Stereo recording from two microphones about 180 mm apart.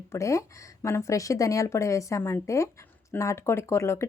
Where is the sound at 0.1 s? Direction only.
15° left (ahead or behind).